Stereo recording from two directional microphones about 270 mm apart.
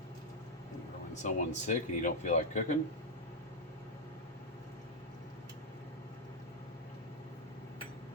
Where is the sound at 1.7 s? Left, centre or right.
Left.